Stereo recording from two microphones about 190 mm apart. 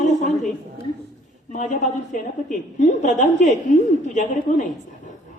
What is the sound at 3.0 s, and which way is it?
Speech, 40° left (ahead or behind).